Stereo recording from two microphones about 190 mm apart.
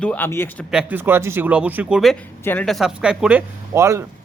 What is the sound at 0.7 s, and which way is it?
Speech, 5° right (ahead or behind).